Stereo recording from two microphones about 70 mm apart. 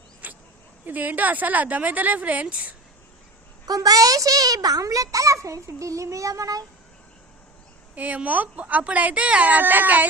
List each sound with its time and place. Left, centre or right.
0.2 s a sound: right
0.9 s speech: right
3.7 s a child's voice: right
7.9 s speech: right